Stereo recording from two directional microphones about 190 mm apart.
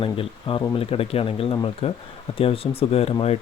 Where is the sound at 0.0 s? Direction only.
25° left (ahead or behind).